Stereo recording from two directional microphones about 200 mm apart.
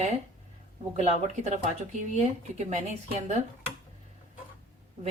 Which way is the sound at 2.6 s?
35° right (ahead or behind).